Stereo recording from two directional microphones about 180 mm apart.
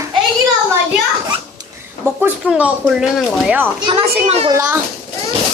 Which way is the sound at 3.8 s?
30° right (ahead or behind).